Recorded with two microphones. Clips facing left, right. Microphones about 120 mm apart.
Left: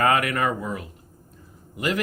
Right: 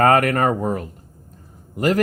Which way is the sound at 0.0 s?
45° right (ahead or behind).